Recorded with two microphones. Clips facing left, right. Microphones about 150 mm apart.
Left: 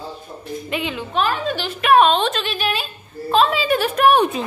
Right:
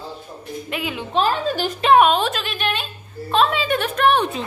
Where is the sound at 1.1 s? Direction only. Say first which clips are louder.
Right 2 dB; 30° right (ahead or behind).